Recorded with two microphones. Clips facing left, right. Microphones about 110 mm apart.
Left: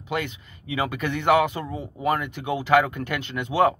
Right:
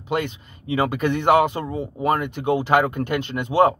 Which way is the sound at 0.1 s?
35° right (ahead or behind).